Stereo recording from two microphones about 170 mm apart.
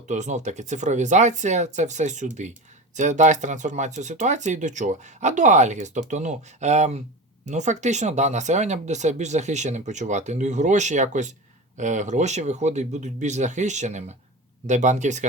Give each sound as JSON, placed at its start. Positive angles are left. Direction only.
{"t": 0.1, "sound": "speech", "side_deg": -45}